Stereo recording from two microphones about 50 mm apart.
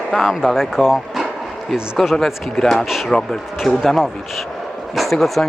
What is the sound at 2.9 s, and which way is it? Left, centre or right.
Speech, centre.